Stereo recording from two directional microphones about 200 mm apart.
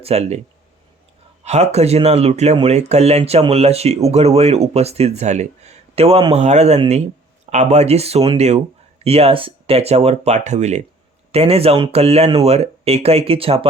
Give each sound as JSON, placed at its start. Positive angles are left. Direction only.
{"t": 0.0, "sound": "speech", "side_deg": -30}
{"t": 1.5, "sound": "speech", "side_deg": -35}